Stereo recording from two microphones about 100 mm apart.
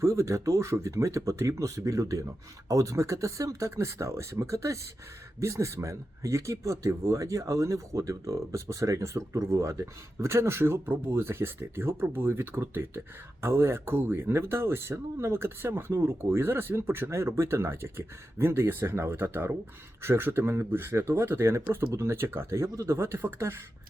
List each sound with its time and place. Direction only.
0.0 s speech: 30° right (ahead or behind)